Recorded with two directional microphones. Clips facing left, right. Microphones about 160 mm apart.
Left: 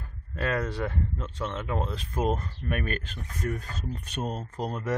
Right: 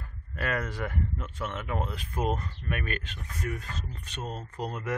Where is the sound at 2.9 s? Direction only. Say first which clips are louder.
Left 2 dB; 40° left (ahead or behind).